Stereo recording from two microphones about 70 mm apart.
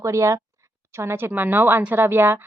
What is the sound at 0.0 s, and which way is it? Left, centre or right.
A woman's voice, right.